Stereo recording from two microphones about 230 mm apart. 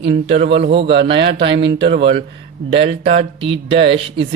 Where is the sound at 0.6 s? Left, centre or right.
Right.